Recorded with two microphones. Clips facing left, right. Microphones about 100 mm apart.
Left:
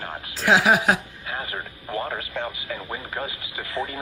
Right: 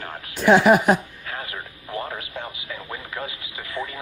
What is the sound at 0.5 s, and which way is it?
Speech, 90° left.